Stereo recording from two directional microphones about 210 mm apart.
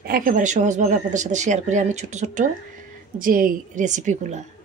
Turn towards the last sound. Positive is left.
turn(degrees=-35)  # may be behind; listen again after turning